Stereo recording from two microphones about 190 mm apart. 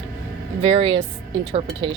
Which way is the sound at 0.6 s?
30° right (ahead or behind).